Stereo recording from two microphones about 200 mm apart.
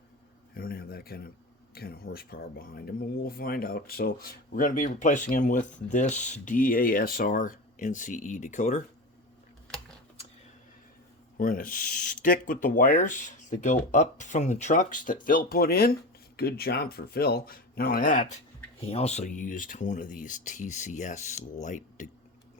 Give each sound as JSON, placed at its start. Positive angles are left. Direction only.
{"t": 0.5, "sound": "a sound", "side_deg": 45}
{"t": 1.7, "sound": "speech", "side_deg": 50}
{"t": 11.3, "sound": "speech", "side_deg": 45}